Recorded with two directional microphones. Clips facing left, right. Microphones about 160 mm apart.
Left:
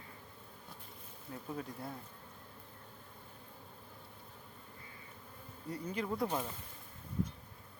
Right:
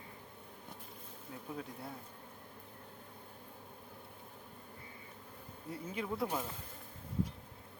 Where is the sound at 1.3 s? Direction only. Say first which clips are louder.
Left 2 dB; centre (ahead or behind).